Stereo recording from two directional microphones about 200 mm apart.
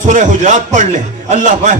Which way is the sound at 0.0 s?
40° right (ahead or behind).